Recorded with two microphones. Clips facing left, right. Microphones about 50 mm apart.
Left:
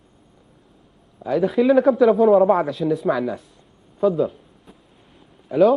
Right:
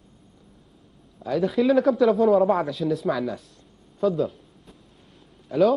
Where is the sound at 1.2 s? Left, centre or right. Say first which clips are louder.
Left 4 dB; centre.